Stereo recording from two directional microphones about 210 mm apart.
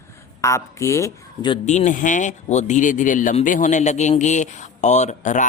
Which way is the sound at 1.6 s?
35° left (ahead or behind).